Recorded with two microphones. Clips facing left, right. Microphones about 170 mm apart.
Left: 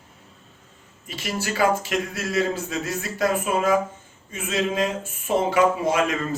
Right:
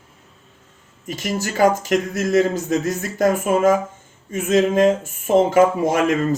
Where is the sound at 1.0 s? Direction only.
45° right (ahead or behind).